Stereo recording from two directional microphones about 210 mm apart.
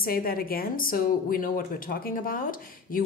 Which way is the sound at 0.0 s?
45° left (ahead or behind).